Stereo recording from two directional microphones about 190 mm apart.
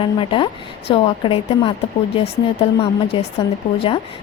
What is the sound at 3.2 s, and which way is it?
Speech, 25° left (ahead or behind).